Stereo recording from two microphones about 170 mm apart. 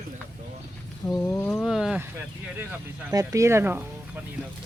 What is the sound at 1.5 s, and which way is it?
Speech, centre (ahead or behind).